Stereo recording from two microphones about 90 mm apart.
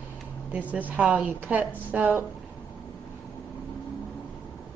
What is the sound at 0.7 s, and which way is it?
A woman's voice, 15° right (ahead or behind).